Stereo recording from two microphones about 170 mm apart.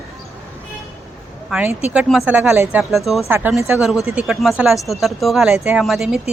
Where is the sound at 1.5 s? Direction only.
5° right (ahead or behind).